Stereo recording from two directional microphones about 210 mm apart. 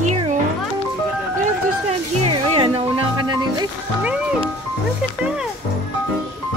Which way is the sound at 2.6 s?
25° right (ahead or behind).